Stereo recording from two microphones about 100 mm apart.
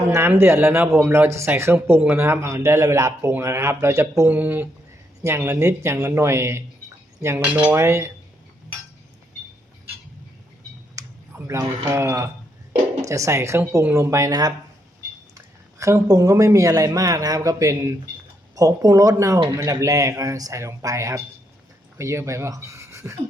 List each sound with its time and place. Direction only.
0.1 s speech: 25° right (ahead or behind)
4.3 s speech: 15° right (ahead or behind)
11.0 s a sound: 35° right (ahead or behind)
11.3 s speech: 30° right (ahead or behind)